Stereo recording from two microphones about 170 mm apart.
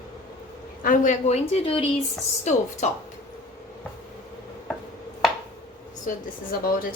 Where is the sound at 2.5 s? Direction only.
45° left (ahead or behind).